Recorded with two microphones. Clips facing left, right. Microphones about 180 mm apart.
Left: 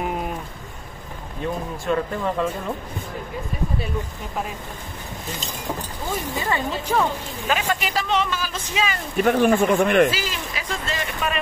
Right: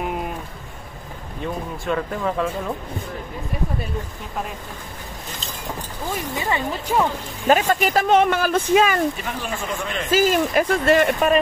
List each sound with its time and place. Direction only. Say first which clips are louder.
1.4 s speech: left 1 dB; centre (ahead or behind)
6.5 s speech: right 1 dB; 15° right (ahead or behind)
7.4 s speech: right 7 dB; 45° right (ahead or behind)
9.2 s speech: left 12 dB; 60° left (ahead or behind)
10.1 s speech: right 12 dB; 50° right (ahead or behind)